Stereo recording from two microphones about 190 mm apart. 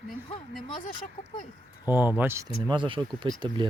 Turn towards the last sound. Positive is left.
turn(degrees=-25)  # may be behind; listen again after turning